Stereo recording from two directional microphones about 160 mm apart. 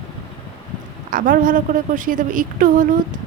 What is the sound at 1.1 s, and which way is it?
A woman's voice, 60° right (ahead or behind).